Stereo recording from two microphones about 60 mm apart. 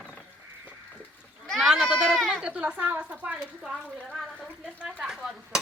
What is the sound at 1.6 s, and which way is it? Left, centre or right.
Goat, centre.